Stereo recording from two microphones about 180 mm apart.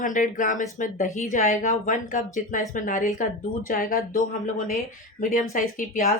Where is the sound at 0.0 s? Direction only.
45° left (ahead or behind).